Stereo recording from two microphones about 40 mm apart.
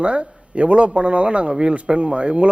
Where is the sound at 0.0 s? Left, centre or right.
Right.